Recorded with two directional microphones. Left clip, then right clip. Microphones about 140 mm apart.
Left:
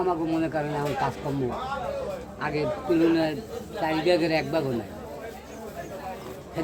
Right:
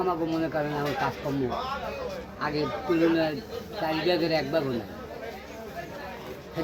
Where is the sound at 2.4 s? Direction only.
20° left (ahead or behind).